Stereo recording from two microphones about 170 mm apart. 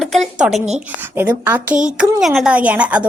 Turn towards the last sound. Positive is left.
turn(degrees=-10)  # may be behind; listen again after turning